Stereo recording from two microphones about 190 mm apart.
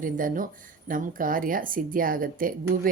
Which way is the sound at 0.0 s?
45° right (ahead or behind).